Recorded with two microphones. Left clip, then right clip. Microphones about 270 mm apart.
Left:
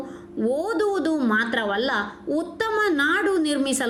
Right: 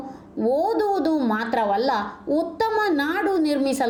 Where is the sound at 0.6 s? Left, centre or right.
Right.